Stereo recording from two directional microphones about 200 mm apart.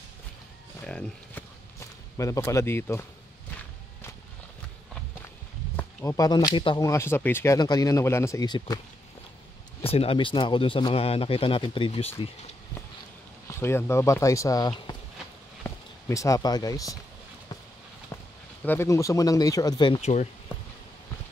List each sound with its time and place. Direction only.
0.8 s a sound: 5° left (ahead or behind)
5.8 s speech: 10° left (ahead or behind)
9.8 s speech: 30° left (ahead or behind)
13.5 s speech: 10° left (ahead or behind)
18.1 s a sound: 10° left (ahead or behind)
18.7 s speech: 15° left (ahead or behind); by 20.2 s 35° left (ahead or behind)